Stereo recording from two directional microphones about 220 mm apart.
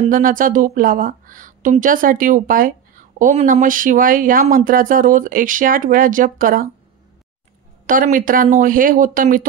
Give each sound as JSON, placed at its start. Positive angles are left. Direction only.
{"t": 0.1, "sound": "a woman's voice", "side_deg": -40}
{"t": 7.8, "sound": "a woman's voice", "side_deg": -40}